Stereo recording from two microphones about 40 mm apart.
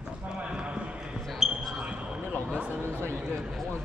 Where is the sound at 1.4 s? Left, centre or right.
Centre.